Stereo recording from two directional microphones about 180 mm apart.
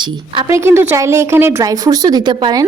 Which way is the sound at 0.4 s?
15° right (ahead or behind).